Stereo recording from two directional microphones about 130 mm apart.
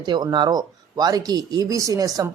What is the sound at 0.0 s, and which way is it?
Speech, 35° right (ahead or behind).